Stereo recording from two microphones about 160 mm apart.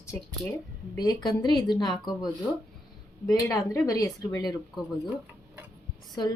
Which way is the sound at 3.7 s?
20° left (ahead or behind).